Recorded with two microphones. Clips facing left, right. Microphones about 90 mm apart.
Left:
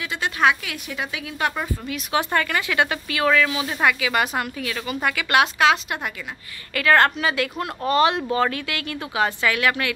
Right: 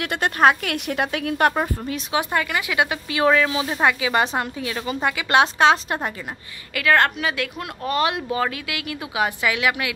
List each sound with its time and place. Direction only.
0.0 s speech: 55° right (ahead or behind)
1.5 s speech: 35° right (ahead or behind)
2.1 s speech: 15° right (ahead or behind); by 6.1 s 30° right (ahead or behind)
6.7 s speech: centre (ahead or behind)